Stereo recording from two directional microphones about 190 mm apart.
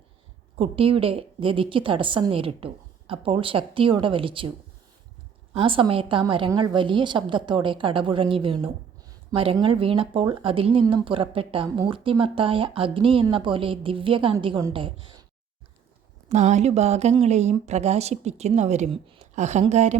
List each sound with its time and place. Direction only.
0.6 s speech: 30° right (ahead or behind)
5.5 s speech: 25° right (ahead or behind)
16.3 s speech: 35° right (ahead or behind)